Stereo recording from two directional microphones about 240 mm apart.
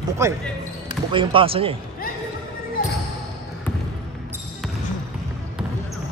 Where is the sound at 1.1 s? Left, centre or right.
Right.